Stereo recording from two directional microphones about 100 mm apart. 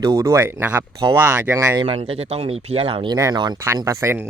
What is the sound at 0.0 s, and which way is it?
Speech, 35° right (ahead or behind).